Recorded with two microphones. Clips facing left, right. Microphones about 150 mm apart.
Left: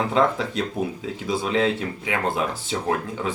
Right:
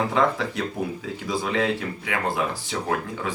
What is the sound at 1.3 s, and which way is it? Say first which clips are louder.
Speech: left 2 dB; 20° left (ahead or behind).